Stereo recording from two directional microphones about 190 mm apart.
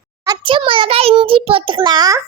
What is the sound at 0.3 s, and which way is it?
A child's voice, 25° right (ahead or behind).